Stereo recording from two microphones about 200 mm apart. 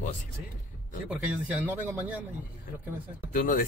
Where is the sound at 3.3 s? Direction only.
40° left (ahead or behind).